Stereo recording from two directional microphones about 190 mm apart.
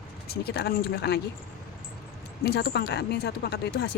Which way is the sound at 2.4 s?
60° left (ahead or behind).